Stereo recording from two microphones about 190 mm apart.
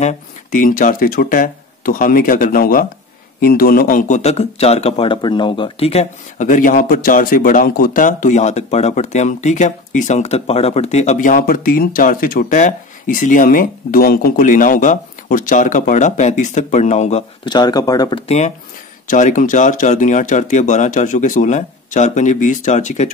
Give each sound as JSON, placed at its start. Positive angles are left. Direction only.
{"t": 0.0, "sound": "speech", "side_deg": 45}
{"t": 17.5, "sound": "speech", "side_deg": 20}
{"t": 19.0, "sound": "speech", "side_deg": 40}